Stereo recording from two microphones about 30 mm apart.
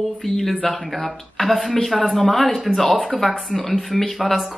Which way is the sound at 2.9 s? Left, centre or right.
Centre.